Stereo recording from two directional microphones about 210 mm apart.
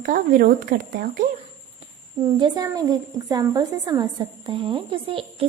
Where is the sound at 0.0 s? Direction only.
40° right (ahead or behind).